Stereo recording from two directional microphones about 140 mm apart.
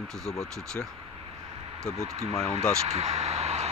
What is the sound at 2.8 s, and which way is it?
Speech, 45° right (ahead or behind).